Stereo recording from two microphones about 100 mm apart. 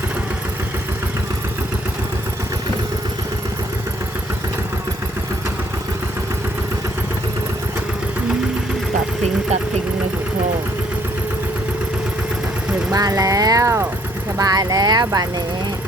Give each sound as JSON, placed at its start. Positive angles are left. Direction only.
{"t": 12.9, "sound": "vehicle", "side_deg": -35}
{"t": 14.3, "sound": "speech", "side_deg": -40}